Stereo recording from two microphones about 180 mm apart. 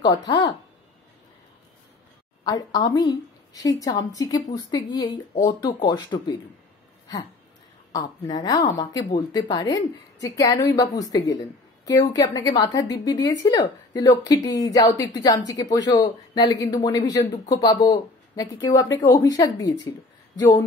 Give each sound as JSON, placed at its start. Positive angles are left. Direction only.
{"t": 0.0, "sound": "a woman's voice", "side_deg": 25}
{"t": 2.4, "sound": "a woman's voice", "side_deg": 20}
{"t": 8.3, "sound": "a woman's voice", "side_deg": 20}